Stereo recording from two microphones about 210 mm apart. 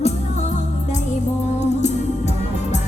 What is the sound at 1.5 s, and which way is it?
Music, 30° left (ahead or behind).